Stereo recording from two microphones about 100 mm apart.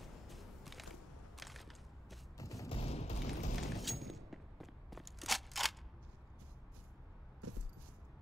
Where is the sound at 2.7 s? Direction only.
85° left.